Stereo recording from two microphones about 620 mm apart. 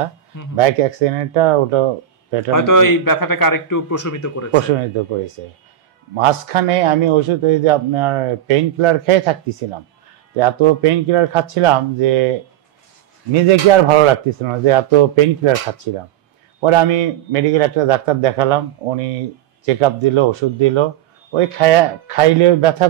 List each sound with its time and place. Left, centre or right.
0.6 s speech: right
2.5 s a man's voice: left
4.6 s speech: right
13.3 s speech: right
19.8 s speech: right